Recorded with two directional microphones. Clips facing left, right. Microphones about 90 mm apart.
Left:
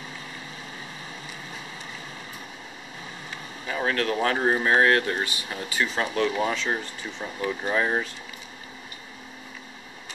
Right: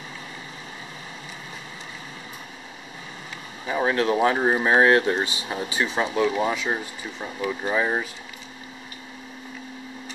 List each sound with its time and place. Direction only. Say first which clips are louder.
3.6 s speech: right 4 dB; 15° right (ahead or behind)